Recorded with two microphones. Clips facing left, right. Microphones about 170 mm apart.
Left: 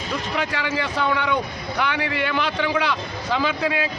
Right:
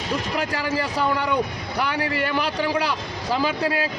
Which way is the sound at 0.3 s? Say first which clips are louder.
Left 1 dB; 40° right (ahead or behind).